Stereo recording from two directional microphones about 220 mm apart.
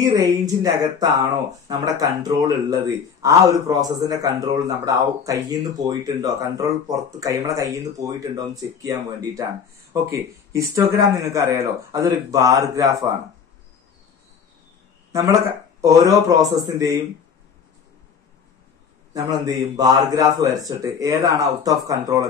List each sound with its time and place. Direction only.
0.0 s a man's voice: 15° right (ahead or behind)
10.5 s a man's voice: 15° right (ahead or behind)
15.1 s a man's voice: 15° right (ahead or behind)
19.1 s a man's voice: 15° right (ahead or behind)